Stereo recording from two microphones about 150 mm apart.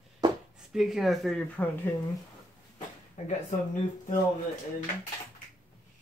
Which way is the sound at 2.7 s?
55° left (ahead or behind).